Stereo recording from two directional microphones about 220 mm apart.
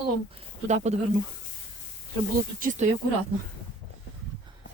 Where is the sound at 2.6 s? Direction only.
35° right (ahead or behind).